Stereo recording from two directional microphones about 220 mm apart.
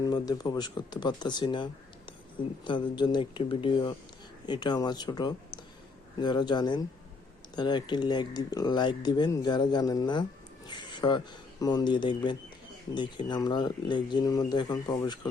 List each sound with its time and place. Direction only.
0.0 s speech: 20° left (ahead or behind)
10.7 s a sound: 20° left (ahead or behind)
11.6 s speech: 20° left (ahead or behind)